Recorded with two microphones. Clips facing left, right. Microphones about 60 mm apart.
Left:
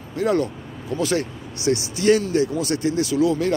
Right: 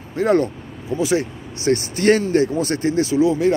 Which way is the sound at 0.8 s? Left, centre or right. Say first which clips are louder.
Right 3 dB; centre.